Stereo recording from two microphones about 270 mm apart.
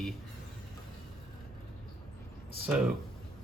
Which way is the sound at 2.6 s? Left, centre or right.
Centre.